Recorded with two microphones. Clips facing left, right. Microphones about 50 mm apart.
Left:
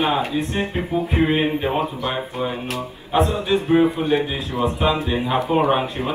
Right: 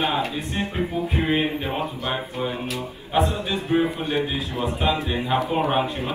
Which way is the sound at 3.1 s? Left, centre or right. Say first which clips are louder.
Left 4 dB; left.